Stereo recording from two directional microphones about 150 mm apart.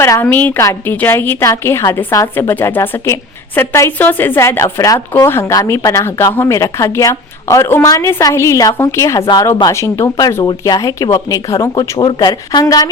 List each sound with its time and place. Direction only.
0.0 s a woman's voice: 15° left (ahead or behind)
9.2 s speech: 30° left (ahead or behind)